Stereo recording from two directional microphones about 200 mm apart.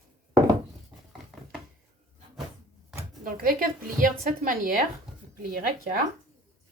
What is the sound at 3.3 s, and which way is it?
A woman's voice, 45° right (ahead or behind).